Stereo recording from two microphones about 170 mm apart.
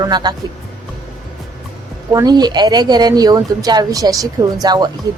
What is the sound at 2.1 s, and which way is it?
Speech, 25° right (ahead or behind).